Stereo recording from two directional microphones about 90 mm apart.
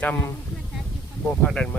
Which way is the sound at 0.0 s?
15° left (ahead or behind).